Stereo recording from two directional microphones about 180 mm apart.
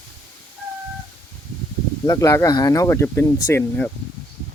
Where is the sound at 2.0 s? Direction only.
20° left (ahead or behind).